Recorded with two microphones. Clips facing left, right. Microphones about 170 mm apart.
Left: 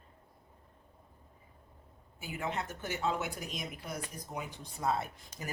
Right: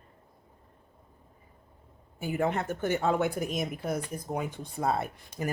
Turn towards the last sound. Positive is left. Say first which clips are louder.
# right 7 dB
turn(degrees=-55)  # may be behind; listen again after turning